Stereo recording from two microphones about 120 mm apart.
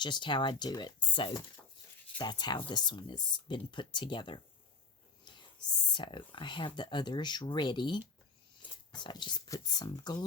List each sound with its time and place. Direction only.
0.0 s speech: 40° left (ahead or behind)
5.2 s whispering: 40° left (ahead or behind)
5.9 s speech: 40° left (ahead or behind)